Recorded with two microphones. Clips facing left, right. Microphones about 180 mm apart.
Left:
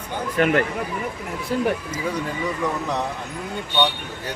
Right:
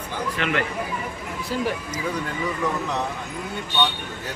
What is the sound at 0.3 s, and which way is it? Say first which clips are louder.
Speech: left 7 dB; 45° left (ahead or behind).